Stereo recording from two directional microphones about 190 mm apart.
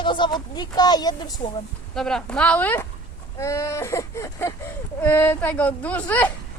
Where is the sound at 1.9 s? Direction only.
5° left (ahead or behind).